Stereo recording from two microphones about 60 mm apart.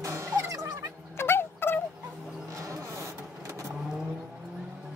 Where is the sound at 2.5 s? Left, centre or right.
Right.